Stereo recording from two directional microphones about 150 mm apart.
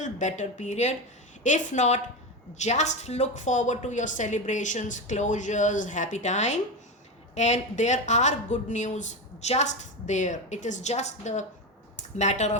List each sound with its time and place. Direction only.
0.0 s a woman's voice: 55° left (ahead or behind)